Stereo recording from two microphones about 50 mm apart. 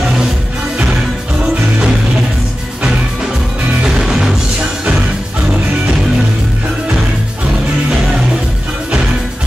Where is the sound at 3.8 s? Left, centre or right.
Centre.